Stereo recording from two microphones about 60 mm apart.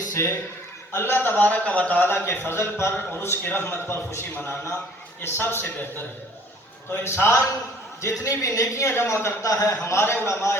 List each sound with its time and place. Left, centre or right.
0.9 s a man's voice: left
6.9 s a man's voice: left
8.0 s speech: left
8.9 s a man's voice: left
9.4 s a man's voice: left